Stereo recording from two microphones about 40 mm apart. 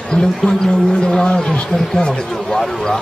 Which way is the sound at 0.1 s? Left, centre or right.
Left.